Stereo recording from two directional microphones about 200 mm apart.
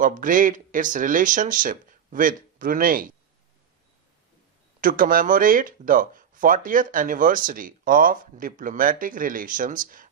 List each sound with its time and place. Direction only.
0.0 s speech: 40° right (ahead or behind)
4.8 s speech: 45° right (ahead or behind)